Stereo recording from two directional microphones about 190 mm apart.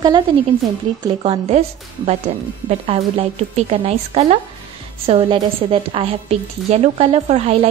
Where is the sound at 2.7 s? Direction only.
30° right (ahead or behind).